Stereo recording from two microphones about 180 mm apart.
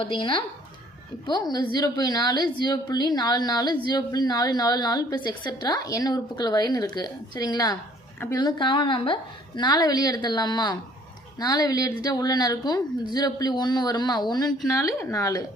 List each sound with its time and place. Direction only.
0.0 s a woman's voice: 30° left (ahead or behind)